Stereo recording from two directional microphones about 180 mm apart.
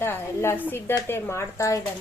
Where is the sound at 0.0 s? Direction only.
15° left (ahead or behind).